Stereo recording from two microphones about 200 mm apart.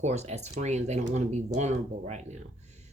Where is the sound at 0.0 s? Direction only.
35° right (ahead or behind).